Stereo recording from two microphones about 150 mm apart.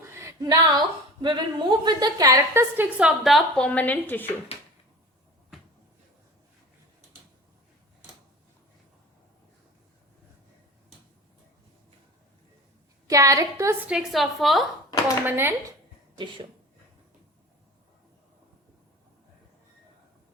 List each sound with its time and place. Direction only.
0.1 s a woman's voice: 20° right (ahead or behind); by 3.7 s centre (ahead or behind)
3.7 s a woman's voice: 10° left (ahead or behind)
4.5 s a sound: 40° left (ahead or behind)
13.1 s a woman's voice: 20° right (ahead or behind)
13.8 s a woman's voice: 5° right (ahead or behind)
15.2 s speech: 15° right (ahead or behind)
16.1 s speech: 35° right (ahead or behind)